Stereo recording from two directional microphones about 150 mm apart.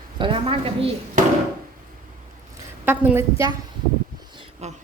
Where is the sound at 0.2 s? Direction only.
35° right (ahead or behind).